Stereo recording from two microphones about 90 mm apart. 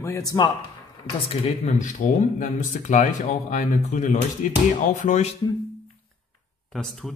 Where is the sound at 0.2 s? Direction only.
45° left (ahead or behind).